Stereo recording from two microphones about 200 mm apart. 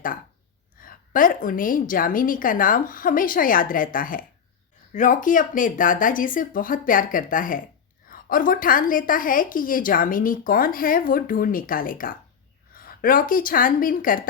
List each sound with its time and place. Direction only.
0.8 s a woman's voice: 45° left (ahead or behind)